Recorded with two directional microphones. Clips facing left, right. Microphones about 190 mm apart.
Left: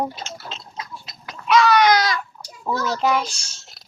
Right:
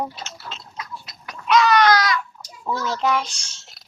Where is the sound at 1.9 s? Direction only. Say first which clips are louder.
Even; 30° left (ahead or behind).